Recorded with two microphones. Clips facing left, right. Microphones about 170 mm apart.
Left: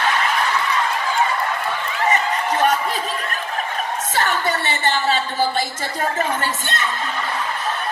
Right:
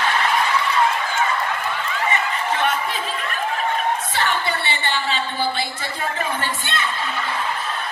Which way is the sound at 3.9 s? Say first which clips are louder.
Left 1 dB; 45° left (ahead or behind).